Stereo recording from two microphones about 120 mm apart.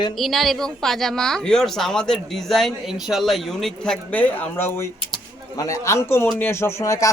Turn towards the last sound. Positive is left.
turn(degrees=25)  # may be behind; listen again after turning